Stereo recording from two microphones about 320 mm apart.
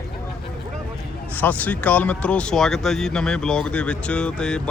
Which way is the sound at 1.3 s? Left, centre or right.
Centre.